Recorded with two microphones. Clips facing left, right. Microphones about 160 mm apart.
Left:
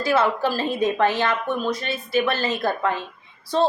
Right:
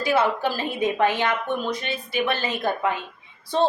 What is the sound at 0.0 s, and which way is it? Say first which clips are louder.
A woman's voice: left 1 dB; 15° right (ahead or behind).